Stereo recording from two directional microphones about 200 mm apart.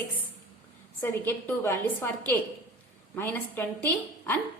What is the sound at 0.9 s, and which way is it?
A woman's voice, 10° left (ahead or behind).